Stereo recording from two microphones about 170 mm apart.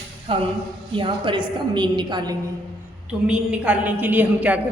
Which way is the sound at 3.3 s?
5° right (ahead or behind).